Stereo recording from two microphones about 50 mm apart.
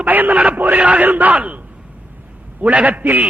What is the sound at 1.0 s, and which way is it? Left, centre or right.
Speech, right.